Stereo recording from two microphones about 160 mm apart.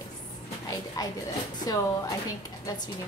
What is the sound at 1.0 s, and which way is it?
Speech, 25° left (ahead or behind).